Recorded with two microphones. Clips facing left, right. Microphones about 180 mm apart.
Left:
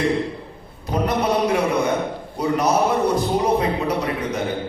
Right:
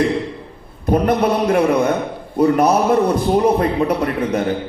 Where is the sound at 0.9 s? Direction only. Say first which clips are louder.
Right 5 dB; 55° right (ahead or behind).